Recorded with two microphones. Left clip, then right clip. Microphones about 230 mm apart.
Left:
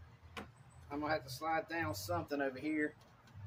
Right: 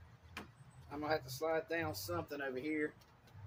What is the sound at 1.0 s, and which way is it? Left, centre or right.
Speech, centre.